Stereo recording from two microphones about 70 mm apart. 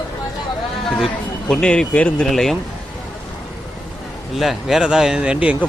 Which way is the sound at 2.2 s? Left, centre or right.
Centre.